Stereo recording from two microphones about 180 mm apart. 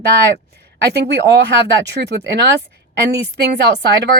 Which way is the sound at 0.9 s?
70° right (ahead or behind).